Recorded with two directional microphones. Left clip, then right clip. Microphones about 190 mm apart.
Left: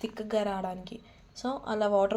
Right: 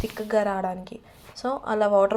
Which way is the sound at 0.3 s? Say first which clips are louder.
Right 7 dB; 5° right (ahead or behind).